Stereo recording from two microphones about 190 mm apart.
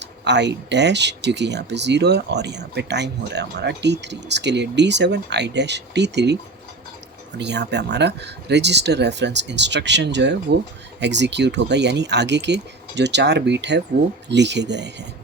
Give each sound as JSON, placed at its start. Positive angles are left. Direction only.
{"t": 0.0, "sound": "speech", "side_deg": -65}